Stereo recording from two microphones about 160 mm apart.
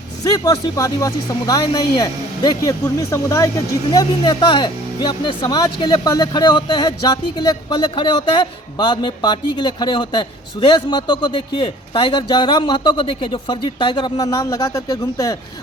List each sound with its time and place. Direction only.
0.3 s speech: 25° left (ahead or behind)